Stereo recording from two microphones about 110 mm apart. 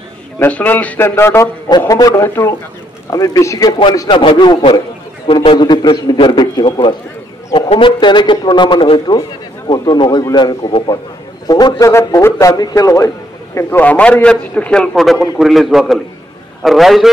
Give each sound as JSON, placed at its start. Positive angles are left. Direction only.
{"t": 0.4, "sound": "a man's voice", "side_deg": 15}
{"t": 1.9, "sound": "a man's voice", "side_deg": 35}
{"t": 2.2, "sound": "a man's voice", "side_deg": 20}
{"t": 4.1, "sound": "a man's voice", "side_deg": 50}
{"t": 11.4, "sound": "a man's voice", "side_deg": 35}
{"t": 13.7, "sound": "a man's voice", "side_deg": 15}